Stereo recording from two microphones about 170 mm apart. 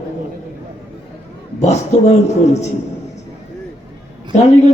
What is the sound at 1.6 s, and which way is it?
Speech, 40° left (ahead or behind).